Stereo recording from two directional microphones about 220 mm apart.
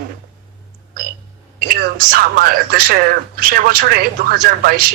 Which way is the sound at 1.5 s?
40° right (ahead or behind).